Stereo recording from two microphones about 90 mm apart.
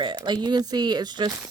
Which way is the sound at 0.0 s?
60° right (ahead or behind).